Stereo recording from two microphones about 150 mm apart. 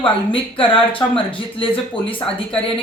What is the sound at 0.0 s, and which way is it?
Speech, 35° left (ahead or behind).